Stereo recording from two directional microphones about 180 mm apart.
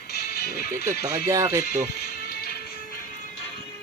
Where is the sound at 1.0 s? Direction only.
20° right (ahead or behind).